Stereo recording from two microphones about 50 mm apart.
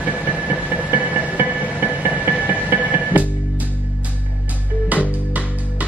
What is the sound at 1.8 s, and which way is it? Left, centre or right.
Music, right.